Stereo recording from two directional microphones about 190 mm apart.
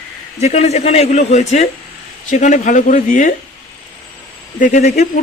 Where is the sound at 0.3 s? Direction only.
35° left (ahead or behind).